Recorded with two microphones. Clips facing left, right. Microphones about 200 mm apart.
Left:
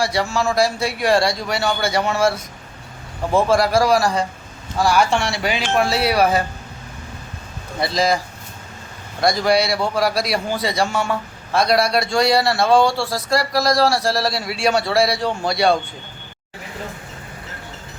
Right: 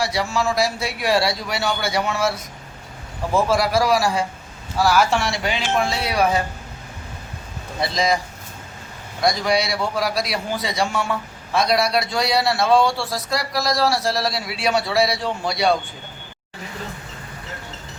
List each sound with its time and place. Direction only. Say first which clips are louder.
0.0 s a man's voice: left 2 dB; centre (ahead or behind)
3.3 s a man's voice: left 3 dB; centre (ahead or behind)
5.4 s speech: left 2 dB; 10° left (ahead or behind)
5.7 s speech: left 6 dB; 70° left (ahead or behind)
7.8 s a man's voice: left 2 dB; centre (ahead or behind)
9.2 s a man's voice: left 3 dB; centre (ahead or behind)